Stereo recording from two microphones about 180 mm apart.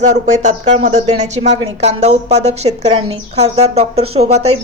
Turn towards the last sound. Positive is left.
turn(degrees=-35)  # may be behind; listen again after turning